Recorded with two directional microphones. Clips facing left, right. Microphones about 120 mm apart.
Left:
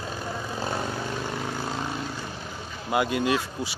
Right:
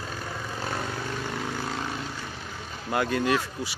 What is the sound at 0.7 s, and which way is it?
Vehicle, 20° left (ahead or behind).